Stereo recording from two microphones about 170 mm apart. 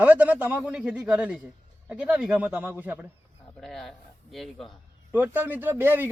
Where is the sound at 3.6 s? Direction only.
Centre (ahead or behind).